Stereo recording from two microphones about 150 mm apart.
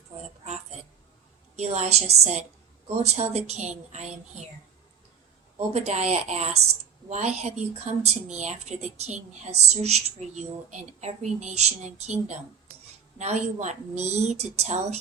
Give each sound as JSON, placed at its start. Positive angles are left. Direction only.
{"t": 0.4, "sound": "a sound", "side_deg": -50}
{"t": 1.5, "sound": "speech", "side_deg": -45}
{"t": 5.7, "sound": "speech", "side_deg": -45}